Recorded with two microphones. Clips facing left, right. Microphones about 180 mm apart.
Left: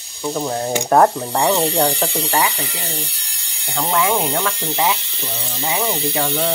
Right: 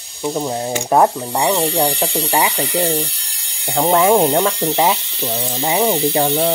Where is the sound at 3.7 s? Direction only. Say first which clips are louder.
Right 6 dB; 40° right (ahead or behind).